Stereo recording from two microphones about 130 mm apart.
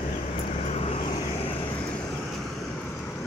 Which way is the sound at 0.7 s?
55° left (ahead or behind).